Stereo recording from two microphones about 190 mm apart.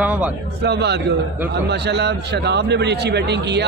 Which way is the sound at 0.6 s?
60° right (ahead or behind).